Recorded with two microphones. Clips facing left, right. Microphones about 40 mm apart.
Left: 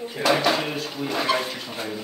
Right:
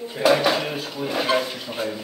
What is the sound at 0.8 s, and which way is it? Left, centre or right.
Speech, centre.